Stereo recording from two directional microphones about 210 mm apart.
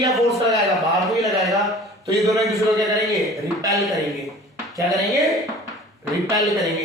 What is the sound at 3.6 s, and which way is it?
Speech, 15° right (ahead or behind).